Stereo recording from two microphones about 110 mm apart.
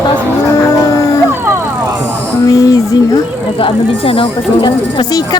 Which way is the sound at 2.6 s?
35° left (ahead or behind).